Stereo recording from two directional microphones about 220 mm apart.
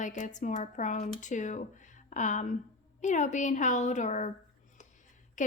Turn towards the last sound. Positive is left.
turn(degrees=35)  # may be behind; listen again after turning